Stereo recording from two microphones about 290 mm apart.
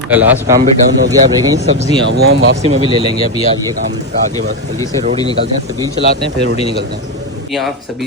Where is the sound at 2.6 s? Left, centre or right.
Right.